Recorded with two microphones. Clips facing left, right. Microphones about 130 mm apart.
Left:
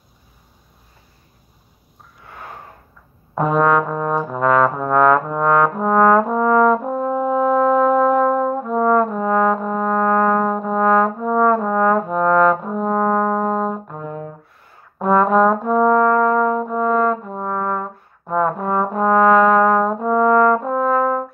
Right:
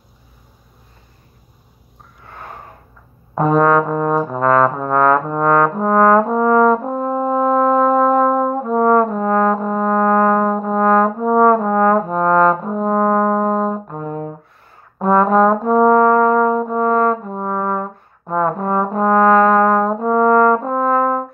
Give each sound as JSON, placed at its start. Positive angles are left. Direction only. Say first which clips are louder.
{"t": 3.3, "sound": "brass instrument", "louder": "right 3 dB", "side_deg": 0}
{"t": 4.3, "sound": "trombone", "louder": "left 1 dB", "side_deg": 0}
{"t": 5.3, "sound": "brass instrument", "louder": "right 2 dB", "side_deg": 0}
{"t": 9.0, "sound": "trombone", "louder": "right 1 dB", "side_deg": 0}
{"t": 11.2, "sound": "trombone", "louder": "right 6 dB", "side_deg": -35}
{"t": 11.5, "sound": "trombone", "louder": "right 2 dB", "side_deg": -5}
{"t": 12.7, "sound": "brass instrument", "louder": "right 2 dB", "side_deg": 0}
{"t": 14.0, "sound": "brass instrument", "louder": "right 5 dB", "side_deg": -30}
{"t": 15.0, "sound": "brass instrument", "louder": "right 1 dB", "side_deg": 0}